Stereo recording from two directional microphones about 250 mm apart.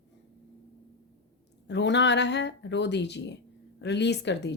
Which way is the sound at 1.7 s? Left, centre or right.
Left.